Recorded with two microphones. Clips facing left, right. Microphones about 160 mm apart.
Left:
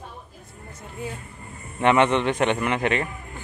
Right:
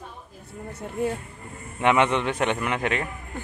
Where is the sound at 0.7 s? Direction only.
60° right (ahead or behind).